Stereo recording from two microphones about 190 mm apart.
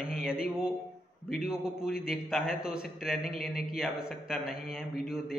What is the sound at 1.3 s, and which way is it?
A man's voice, centre (ahead or behind).